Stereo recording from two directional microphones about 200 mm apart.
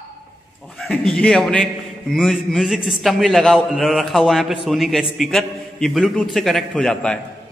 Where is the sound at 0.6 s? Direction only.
Centre (ahead or behind).